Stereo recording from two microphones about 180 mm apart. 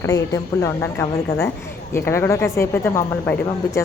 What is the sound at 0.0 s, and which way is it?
A woman's voice, 15° left (ahead or behind).